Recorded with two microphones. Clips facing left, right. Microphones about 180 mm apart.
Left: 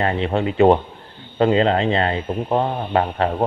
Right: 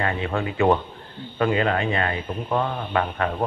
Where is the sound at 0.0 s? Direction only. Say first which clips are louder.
Left 5 dB; 25° left (ahead or behind).